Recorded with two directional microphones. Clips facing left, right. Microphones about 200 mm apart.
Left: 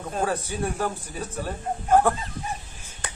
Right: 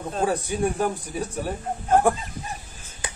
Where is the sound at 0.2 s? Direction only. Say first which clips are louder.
Right 4 dB; 15° right (ahead or behind).